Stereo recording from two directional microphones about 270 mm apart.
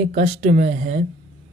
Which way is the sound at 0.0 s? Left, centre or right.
Right.